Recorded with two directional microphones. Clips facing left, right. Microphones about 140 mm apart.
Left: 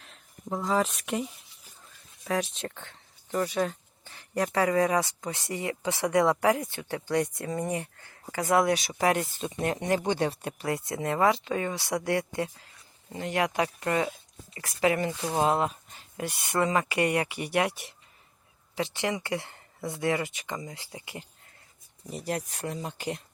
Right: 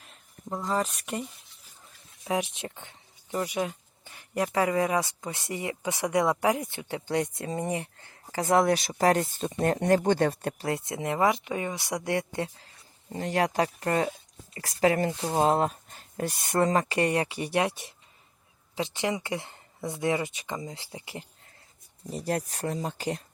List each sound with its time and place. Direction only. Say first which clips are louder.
0.0 s speech: left 1 dB; centre (ahead or behind)
2.2 s a sound: even; 15° right (ahead or behind)
4.5 s speech: left 1 dB; 20° right (ahead or behind); by 10.5 s 45° right (ahead or behind)
10.6 s speech: left 3 dB; 25° right (ahead or behind)
22.1 s speech: right 2 dB; 40° right (ahead or behind)